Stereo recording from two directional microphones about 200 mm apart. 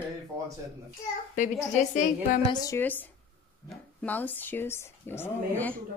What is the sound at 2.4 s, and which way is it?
A woman's voice, 20° left (ahead or behind).